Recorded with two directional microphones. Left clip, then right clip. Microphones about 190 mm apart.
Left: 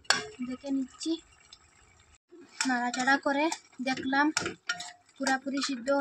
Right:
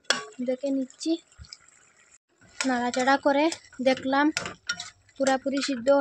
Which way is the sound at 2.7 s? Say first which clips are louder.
Right 4 dB; 40° right (ahead or behind).